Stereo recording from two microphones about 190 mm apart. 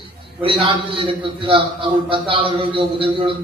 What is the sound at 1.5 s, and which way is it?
A man's voice, 25° right (ahead or behind).